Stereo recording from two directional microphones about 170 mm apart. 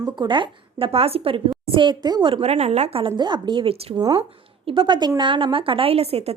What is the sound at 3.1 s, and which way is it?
A woman's voice, 25° right (ahead or behind).